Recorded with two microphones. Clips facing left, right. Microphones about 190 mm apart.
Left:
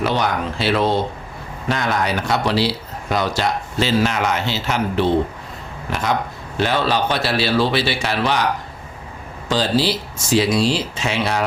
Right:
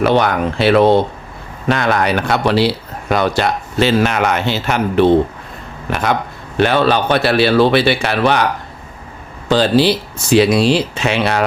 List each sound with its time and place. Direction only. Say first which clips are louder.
0.0 s speech: right 6 dB; 60° right (ahead or behind)
9.5 s speech: right 6 dB; 65° right (ahead or behind)